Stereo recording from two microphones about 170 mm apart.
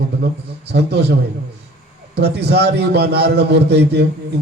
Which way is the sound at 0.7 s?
75° right (ahead or behind).